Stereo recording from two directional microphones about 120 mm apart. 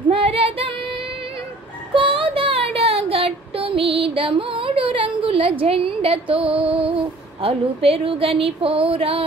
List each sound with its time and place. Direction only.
0.1 s female singing: 50° right (ahead or behind)
2.0 s child singing: 50° right (ahead or behind)
6.7 s female singing: 10° right (ahead or behind)
7.4 s speech: 55° right (ahead or behind)